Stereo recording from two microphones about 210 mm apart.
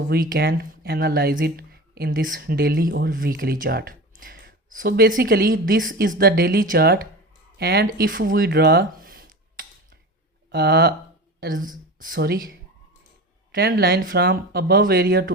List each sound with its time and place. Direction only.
0.1 s speech: 45° right (ahead or behind)
11.3 s speech: 40° right (ahead or behind)
13.5 s speech: 45° right (ahead or behind)